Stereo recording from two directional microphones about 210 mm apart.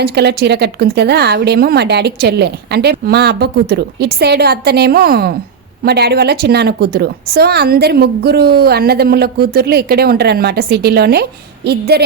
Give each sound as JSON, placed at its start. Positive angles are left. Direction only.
{"t": 0.0, "sound": "a woman's voice", "side_deg": -50}